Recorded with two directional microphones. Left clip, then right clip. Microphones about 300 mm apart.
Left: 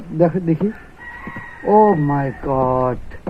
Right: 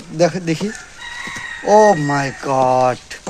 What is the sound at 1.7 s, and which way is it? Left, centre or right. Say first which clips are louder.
Speech: right 2 dB; right.